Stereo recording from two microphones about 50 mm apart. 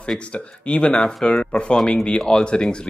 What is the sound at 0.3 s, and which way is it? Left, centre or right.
Speech, left.